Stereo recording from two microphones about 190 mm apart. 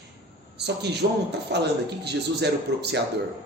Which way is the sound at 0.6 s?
60° right (ahead or behind).